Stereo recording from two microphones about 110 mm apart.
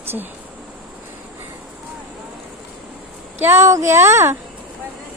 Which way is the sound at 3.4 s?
25° right (ahead or behind).